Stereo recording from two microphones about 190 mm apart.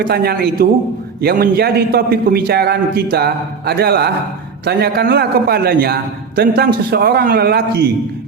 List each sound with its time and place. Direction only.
0.0 s a man's voice: 55° right (ahead or behind)